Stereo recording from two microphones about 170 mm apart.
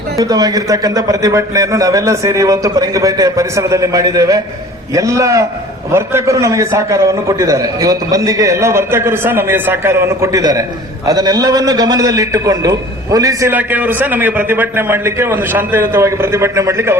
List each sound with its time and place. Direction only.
0.2 s a man's voice: 20° right (ahead or behind)